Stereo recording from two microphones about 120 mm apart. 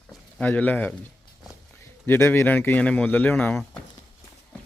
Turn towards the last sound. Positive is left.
turn(degrees=5)  # may be behind; listen again after turning